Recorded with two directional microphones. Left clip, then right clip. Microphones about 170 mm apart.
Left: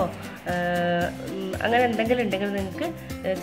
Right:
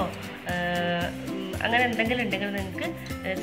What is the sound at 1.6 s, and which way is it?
Speech, 50° left (ahead or behind).